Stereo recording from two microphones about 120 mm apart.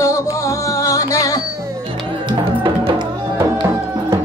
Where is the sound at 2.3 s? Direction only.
45° right (ahead or behind).